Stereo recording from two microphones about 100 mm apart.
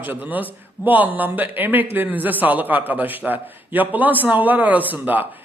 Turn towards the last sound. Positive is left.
turn(degrees=-15)  # may be behind; listen again after turning